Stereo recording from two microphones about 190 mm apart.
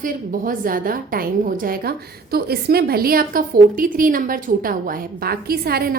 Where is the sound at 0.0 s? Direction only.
45° right (ahead or behind).